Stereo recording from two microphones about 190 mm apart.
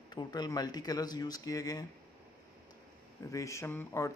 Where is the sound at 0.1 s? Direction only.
20° left (ahead or behind).